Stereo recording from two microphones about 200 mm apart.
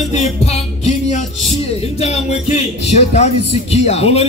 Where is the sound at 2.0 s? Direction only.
30° left (ahead or behind).